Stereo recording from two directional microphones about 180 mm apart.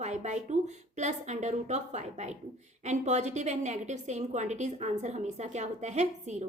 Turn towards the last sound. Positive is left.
turn(degrees=-40)  # may be behind; listen again after turning